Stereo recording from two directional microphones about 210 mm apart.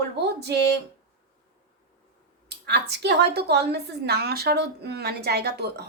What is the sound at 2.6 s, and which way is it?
A woman's voice, 50° right (ahead or behind).